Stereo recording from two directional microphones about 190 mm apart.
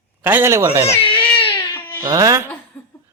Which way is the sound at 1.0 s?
30° left (ahead or behind).